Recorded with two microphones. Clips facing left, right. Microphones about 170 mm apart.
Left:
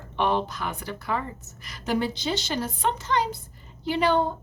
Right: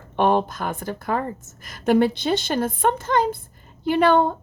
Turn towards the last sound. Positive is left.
turn(degrees=-60)  # may be behind; listen again after turning